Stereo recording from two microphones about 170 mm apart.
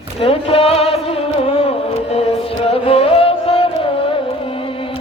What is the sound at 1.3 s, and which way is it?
Music, 35° left (ahead or behind).